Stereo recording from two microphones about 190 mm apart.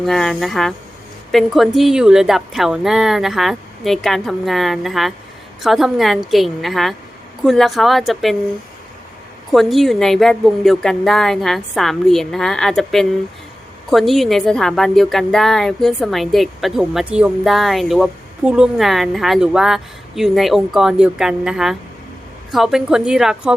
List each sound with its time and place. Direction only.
0.0 s a woman's voice: centre (ahead or behind)
9.5 s a woman's voice: centre (ahead or behind)